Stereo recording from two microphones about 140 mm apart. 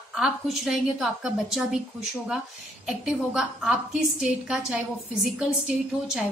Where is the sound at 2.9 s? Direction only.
5° right (ahead or behind).